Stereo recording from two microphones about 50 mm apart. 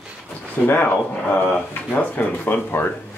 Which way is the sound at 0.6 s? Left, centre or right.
Left.